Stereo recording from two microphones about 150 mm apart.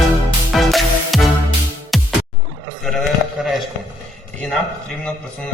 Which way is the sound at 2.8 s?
Centre (ahead or behind).